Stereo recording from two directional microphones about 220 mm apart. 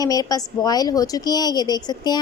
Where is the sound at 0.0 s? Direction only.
15° left (ahead or behind).